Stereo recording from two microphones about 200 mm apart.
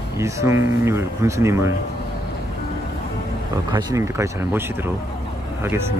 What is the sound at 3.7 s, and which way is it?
Speech, 15° right (ahead or behind).